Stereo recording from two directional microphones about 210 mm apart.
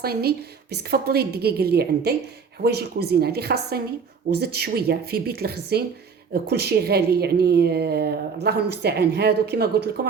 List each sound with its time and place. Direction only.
0.0 s a woman's voice: 50° right (ahead or behind)